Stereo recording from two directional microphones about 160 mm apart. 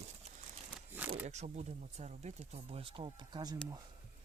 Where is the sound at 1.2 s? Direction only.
45° right (ahead or behind); by 3.5 s 30° right (ahead or behind).